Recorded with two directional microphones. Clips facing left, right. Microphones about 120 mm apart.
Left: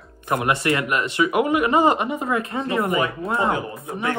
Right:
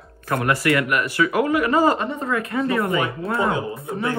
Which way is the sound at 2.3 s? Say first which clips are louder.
Right 3 dB; 25° left (ahead or behind).